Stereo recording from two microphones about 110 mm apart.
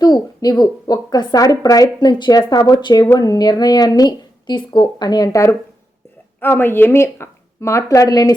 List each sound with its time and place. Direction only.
0.0 s speech: 40° left (ahead or behind)